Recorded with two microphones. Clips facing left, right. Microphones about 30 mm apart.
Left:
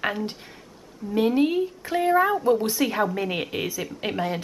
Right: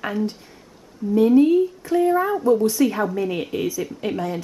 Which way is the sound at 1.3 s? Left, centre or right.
Left.